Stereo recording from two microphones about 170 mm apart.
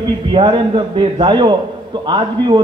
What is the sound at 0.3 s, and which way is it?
A man's voice, 30° right (ahead or behind).